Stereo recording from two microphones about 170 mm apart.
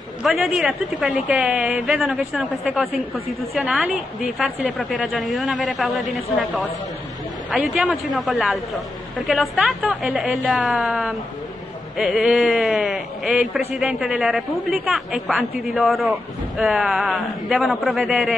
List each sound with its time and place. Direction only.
0.2 s a woman's voice: 5° right (ahead or behind)